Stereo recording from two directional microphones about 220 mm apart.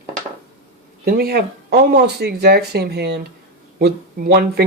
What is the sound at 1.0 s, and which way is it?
Speech, 45° right (ahead or behind).